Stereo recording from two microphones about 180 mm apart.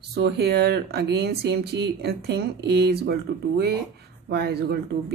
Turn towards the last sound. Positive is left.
turn(degrees=-65)  # may be behind; listen again after turning